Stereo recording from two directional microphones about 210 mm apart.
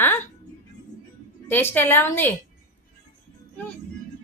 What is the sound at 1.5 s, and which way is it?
Speech, 10° left (ahead or behind).